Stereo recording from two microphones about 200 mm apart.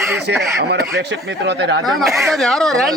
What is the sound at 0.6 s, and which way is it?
Speech, 55° right (ahead or behind).